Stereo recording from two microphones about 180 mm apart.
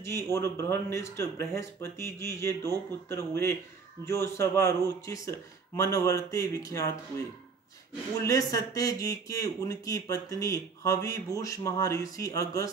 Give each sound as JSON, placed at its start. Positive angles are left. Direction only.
{"t": 0.0, "sound": "speech", "side_deg": 15}
{"t": 8.2, "sound": "speech", "side_deg": 20}